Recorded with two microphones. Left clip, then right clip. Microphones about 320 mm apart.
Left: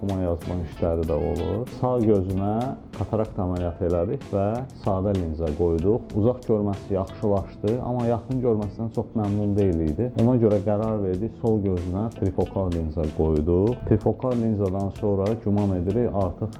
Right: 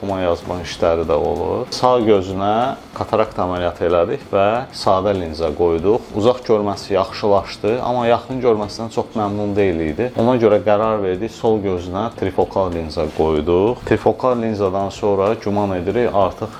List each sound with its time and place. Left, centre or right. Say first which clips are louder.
0.1 s speech: right 10 dB; centre
1.7 s speech: right 9 dB; centre
8.5 s speech: right 8 dB; centre
12.4 s speech: right 10 dB; centre
14.1 s speech: right 8 dB; centre